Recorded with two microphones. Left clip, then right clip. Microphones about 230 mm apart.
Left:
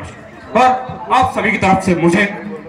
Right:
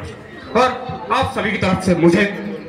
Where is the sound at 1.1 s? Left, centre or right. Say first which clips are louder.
Left 6 dB; left.